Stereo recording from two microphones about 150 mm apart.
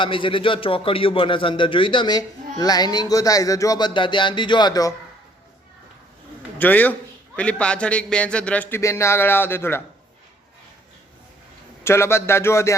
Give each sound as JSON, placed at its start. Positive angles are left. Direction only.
{"t": 0.0, "sound": "a man's voice", "side_deg": 35}
{"t": 6.6, "sound": "speech", "side_deg": 10}
{"t": 11.8, "sound": "speech", "side_deg": 15}